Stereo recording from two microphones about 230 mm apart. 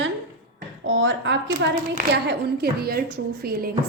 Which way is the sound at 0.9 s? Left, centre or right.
Right.